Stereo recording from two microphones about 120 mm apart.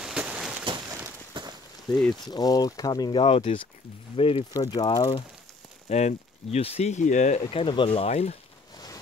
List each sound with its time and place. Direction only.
0.0 s a sound: 10° right (ahead or behind)
1.9 s speech: 5° left (ahead or behind)
2.2 s speech: 35° left (ahead or behind)
3.3 s speech: 60° left (ahead or behind)
4.6 s speech: 35° left (ahead or behind)
5.9 s speech: 65° left (ahead or behind); by 7.4 s 85° left
7.5 s speech: 45° left (ahead or behind); by 8.4 s 65° left (ahead or behind)